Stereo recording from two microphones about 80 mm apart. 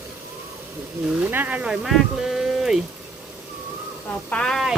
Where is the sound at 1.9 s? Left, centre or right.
Centre.